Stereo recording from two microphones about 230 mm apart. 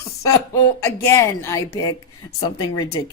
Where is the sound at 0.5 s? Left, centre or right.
Centre.